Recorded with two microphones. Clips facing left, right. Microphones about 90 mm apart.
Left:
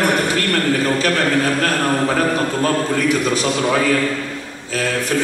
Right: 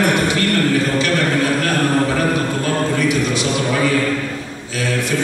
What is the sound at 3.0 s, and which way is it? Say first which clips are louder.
Speech: even; 40° left (ahead or behind).